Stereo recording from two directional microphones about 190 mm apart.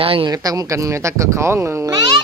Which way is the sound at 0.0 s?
25° right (ahead or behind).